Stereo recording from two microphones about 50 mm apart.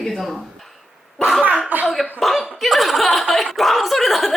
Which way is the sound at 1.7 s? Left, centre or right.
Right.